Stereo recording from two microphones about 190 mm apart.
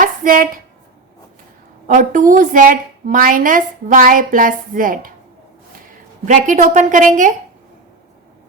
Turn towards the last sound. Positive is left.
turn(degrees=-40)  # may be behind; listen again after turning